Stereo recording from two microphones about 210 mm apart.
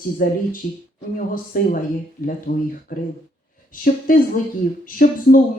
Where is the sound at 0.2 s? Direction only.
40° left (ahead or behind).